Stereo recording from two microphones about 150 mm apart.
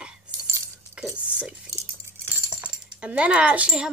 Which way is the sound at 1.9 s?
15° right (ahead or behind).